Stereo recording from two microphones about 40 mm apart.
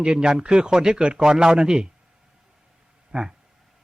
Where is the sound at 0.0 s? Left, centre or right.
Right.